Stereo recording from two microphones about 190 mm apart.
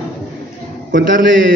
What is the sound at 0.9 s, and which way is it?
Speech, 50° right (ahead or behind).